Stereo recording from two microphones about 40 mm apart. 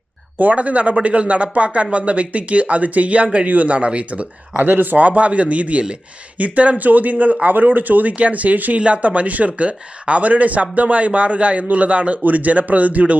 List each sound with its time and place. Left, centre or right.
0.3 s speech: right
3.8 s speech: right
4.6 s speech: right